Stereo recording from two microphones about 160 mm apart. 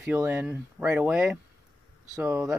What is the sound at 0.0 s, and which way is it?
Speech, 10° right (ahead or behind).